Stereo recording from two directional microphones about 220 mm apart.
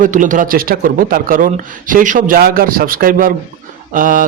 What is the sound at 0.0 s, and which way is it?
Speech, 35° right (ahead or behind).